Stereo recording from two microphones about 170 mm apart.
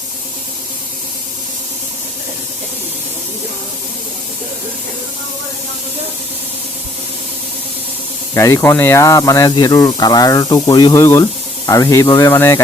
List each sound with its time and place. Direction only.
8.4 s speech: 20° left (ahead or behind)